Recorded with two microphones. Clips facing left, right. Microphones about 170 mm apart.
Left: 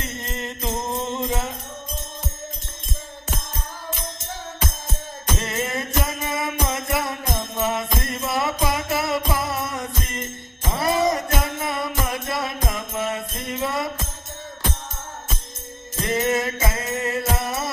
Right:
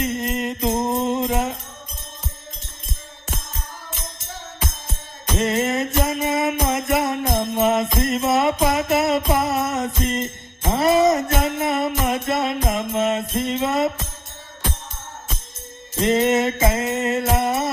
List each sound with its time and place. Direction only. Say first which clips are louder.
0.0 s music: right 8 dB; 15° right (ahead or behind)
5.4 s music: right 9 dB; 20° right (ahead or behind)
7.6 s jingle bell: right 5 dB; 20° right (ahead or behind)
10.7 s music: right 5 dB; 25° right (ahead or behind)
16.0 s jingle bell: right 5 dB; 25° right (ahead or behind)
16.7 s music: right 4 dB; 20° right (ahead or behind)